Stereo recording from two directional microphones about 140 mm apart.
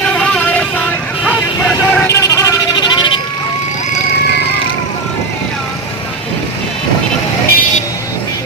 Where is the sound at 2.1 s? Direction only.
20° left (ahead or behind).